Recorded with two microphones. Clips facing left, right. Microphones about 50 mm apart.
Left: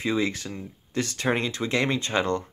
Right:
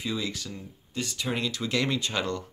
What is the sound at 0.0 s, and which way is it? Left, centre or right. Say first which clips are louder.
Speech: left 6 dB; left.